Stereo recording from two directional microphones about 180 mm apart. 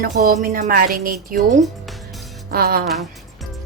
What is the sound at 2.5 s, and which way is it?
Speech, 55° right (ahead or behind).